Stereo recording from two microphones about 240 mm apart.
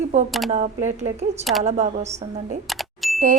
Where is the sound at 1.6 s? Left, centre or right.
Right.